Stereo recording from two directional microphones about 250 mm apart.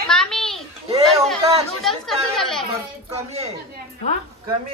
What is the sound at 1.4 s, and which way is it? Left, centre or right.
Chatter, right.